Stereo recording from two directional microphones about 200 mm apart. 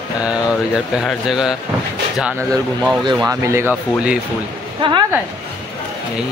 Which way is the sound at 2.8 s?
Centre (ahead or behind).